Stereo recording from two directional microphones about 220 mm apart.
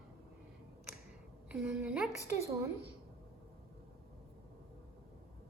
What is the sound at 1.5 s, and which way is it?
Speech, 5° right (ahead or behind).